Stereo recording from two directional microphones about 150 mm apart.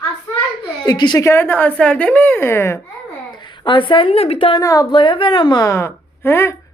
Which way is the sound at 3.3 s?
30° left (ahead or behind).